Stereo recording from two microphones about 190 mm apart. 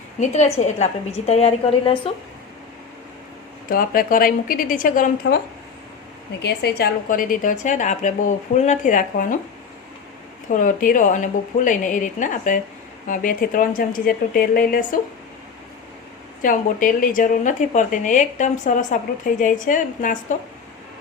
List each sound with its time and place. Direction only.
0.2 s a woman's voice: 35° left (ahead or behind)
3.7 s a woman's voice: 50° left (ahead or behind)
6.4 s a woman's voice: 60° left (ahead or behind); by 9.2 s 45° left (ahead or behind)
10.5 s a woman's voice: 45° left (ahead or behind)
16.4 s a woman's voice: 45° left (ahead or behind)